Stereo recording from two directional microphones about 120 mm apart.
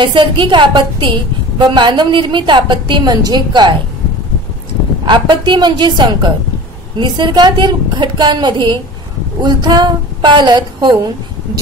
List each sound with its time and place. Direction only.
0.0 s a woman's voice: 40° right (ahead or behind)
5.0 s a woman's voice: 40° right (ahead or behind)